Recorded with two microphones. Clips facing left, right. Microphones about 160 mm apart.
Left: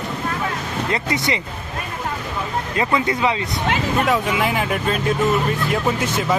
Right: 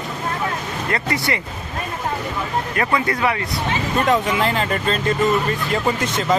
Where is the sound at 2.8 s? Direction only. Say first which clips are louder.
Left 1 dB; 20° left (ahead or behind).